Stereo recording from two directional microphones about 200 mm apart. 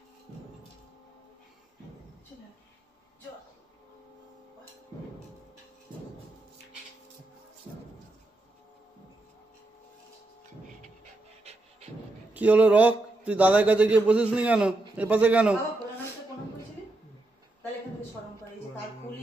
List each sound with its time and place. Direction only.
11.5 s pant: 30° right (ahead or behind)
12.4 s a man's voice: 5° right (ahead or behind)